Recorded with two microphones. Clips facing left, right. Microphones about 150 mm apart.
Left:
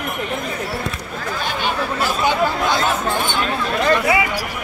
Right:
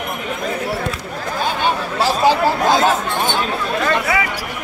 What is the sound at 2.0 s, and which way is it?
Chatter, 35° right (ahead or behind).